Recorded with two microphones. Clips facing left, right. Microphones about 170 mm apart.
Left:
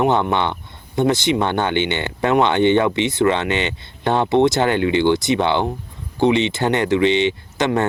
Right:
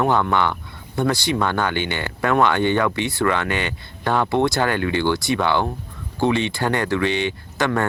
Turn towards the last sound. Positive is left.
turn(degrees=20)  # may be behind; listen again after turning